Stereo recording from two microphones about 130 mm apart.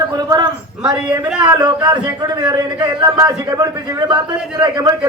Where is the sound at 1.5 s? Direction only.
30° right (ahead or behind).